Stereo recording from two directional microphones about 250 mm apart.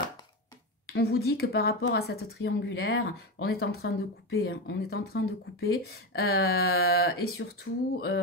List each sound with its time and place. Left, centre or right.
0.8 s speech: left